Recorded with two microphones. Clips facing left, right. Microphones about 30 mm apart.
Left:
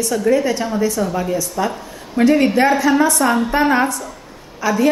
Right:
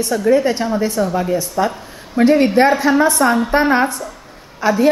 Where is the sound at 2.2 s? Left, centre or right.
Right.